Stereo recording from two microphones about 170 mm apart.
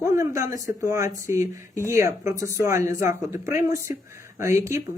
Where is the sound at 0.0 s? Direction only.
20° right (ahead or behind).